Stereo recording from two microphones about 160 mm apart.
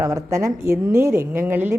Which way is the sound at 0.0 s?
20° right (ahead or behind).